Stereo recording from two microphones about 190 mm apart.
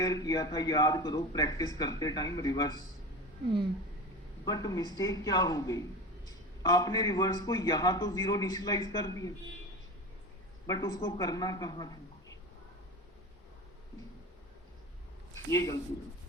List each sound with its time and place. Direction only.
0.0 s a man's voice: 20° left (ahead or behind)
4.4 s a man's voice: 20° left (ahead or behind)
10.7 s speech: 20° left (ahead or behind)
15.4 s a man's voice: 15° left (ahead or behind)